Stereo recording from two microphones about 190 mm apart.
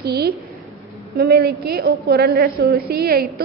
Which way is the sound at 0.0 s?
55° right (ahead or behind).